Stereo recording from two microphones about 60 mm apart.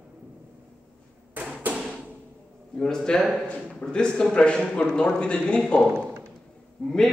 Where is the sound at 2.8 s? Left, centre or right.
Centre.